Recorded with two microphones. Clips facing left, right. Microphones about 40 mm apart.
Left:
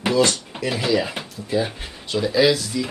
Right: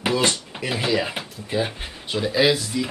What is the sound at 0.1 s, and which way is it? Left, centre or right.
Speech, right.